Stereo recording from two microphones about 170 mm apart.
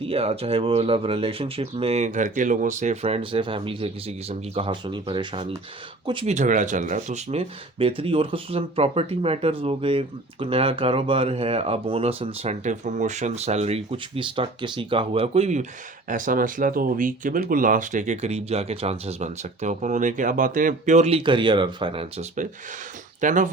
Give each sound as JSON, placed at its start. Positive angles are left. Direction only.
{"t": 0.0, "sound": "speech", "side_deg": -35}
{"t": 6.2, "sound": "speech", "side_deg": -45}
{"t": 16.0, "sound": "speech", "side_deg": -55}
{"t": 21.2, "sound": "speech", "side_deg": -30}
{"t": 23.2, "sound": "speech", "side_deg": -50}